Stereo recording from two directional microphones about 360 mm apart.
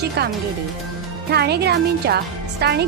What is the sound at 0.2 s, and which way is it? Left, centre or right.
Speech, right.